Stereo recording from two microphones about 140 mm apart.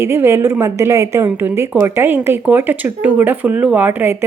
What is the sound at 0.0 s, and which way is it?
A woman's voice, 15° right (ahead or behind).